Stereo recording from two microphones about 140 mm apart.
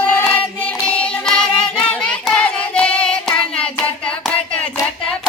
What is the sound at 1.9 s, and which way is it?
Child singing, 5° left (ahead or behind).